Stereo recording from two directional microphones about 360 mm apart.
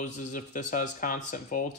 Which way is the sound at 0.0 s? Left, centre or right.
Left.